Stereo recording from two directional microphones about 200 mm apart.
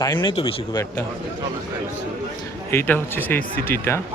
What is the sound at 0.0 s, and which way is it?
Speech, 20° left (ahead or behind).